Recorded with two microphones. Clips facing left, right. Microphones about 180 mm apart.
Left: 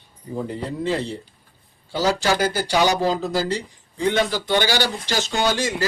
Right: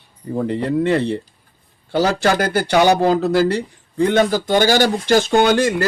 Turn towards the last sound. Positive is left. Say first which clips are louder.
# right 8 dB
turn(degrees=-55)  # may be behind; listen again after turning